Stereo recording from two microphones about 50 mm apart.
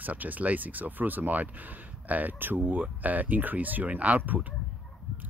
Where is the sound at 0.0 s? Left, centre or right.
Right.